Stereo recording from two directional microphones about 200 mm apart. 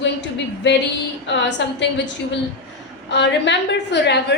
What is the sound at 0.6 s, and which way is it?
A woman's voice, 60° left (ahead or behind).